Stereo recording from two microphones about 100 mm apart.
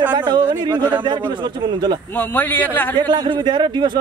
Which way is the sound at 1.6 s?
50° right (ahead or behind).